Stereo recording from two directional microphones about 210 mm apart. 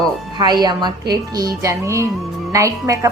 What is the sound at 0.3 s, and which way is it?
A woman's voice, 20° right (ahead or behind).